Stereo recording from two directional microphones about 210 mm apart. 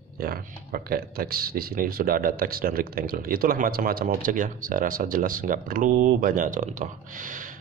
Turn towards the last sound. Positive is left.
turn(degrees=-40)  # may be behind; listen again after turning